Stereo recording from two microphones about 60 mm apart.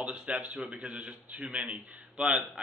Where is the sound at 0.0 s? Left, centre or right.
Centre.